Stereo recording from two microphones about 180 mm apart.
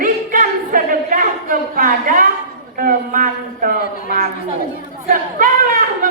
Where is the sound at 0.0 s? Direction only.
50° right (ahead or behind).